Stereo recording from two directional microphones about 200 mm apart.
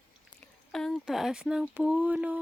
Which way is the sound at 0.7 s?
Centre (ahead or behind).